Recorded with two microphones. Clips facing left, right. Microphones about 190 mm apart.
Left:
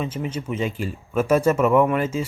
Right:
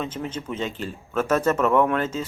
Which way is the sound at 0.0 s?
10° left (ahead or behind).